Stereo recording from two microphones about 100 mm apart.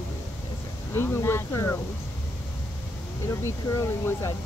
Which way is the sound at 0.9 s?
25° left (ahead or behind).